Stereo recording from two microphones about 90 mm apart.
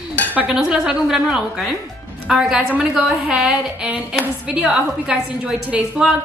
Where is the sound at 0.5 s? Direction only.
5° right (ahead or behind).